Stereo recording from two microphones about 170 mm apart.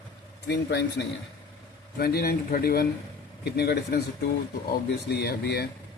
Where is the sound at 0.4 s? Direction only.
90° left.